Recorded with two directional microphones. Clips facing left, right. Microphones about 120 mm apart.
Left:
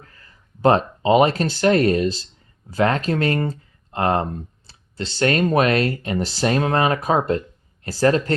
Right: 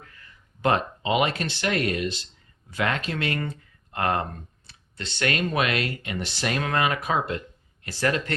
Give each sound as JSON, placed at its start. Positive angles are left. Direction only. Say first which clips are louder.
{"t": 0.0, "sound": "speech", "louder": "left 1 dB", "side_deg": 35}